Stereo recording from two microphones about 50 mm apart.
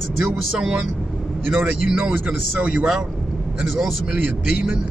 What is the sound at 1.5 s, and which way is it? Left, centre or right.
Speech, centre.